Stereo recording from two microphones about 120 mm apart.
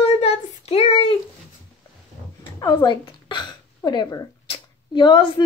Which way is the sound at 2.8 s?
40° left (ahead or behind).